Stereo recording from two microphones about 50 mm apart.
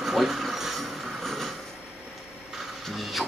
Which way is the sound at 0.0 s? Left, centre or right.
Centre.